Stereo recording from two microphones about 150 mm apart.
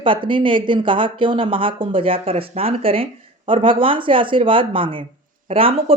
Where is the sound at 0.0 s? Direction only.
35° right (ahead or behind).